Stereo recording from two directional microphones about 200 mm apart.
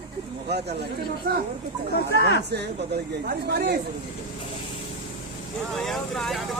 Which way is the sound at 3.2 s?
50° right (ahead or behind).